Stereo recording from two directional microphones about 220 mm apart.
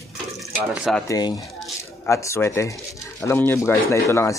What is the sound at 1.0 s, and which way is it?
Speech, 15° left (ahead or behind).